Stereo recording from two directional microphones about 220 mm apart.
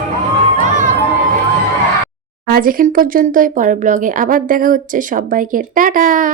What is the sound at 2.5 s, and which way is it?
Speech, 40° right (ahead or behind).